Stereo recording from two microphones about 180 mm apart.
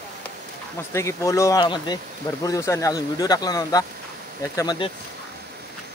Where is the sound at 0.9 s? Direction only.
15° left (ahead or behind).